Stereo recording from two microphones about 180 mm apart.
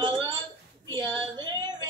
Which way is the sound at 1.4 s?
25° right (ahead or behind).